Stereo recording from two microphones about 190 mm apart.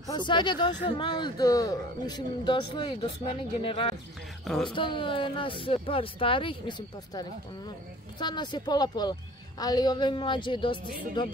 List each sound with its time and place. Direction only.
0.0 s speech: 25° left (ahead or behind)
4.5 s a woman's voice: 5° left (ahead or behind)
4.7 s speech: 25° left (ahead or behind)
8.2 s speech: 25° left (ahead or behind)